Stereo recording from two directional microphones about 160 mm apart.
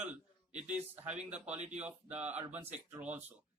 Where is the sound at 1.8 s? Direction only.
10° right (ahead or behind).